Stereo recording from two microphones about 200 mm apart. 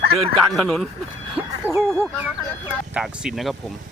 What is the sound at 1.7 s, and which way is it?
Speech, centre (ahead or behind).